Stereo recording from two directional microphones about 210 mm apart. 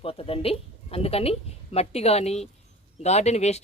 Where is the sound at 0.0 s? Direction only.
25° left (ahead or behind).